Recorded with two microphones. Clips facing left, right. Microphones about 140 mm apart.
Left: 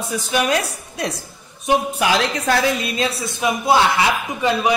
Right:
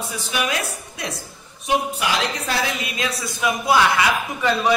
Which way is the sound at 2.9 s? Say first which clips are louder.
Left 4 dB; 30° left (ahead or behind).